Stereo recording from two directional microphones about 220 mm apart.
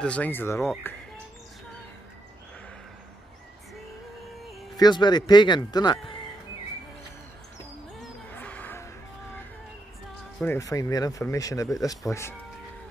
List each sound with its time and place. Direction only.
0.0 s speech: 5° left (ahead or behind)
4.7 s speech: 20° left (ahead or behind)
8.0 s a sound: 5° left (ahead or behind)
10.4 s speech: 10° left (ahead or behind)